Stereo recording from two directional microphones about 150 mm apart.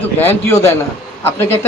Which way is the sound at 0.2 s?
15° left (ahead or behind).